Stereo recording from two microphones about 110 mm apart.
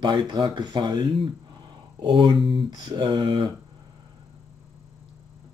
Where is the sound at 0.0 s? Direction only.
45° right (ahead or behind).